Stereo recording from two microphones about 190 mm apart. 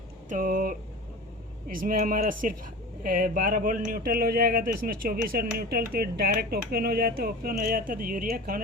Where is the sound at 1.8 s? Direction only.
50° right (ahead or behind).